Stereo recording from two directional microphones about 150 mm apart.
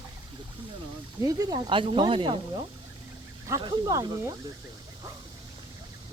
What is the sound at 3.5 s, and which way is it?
Speech, 20° right (ahead or behind).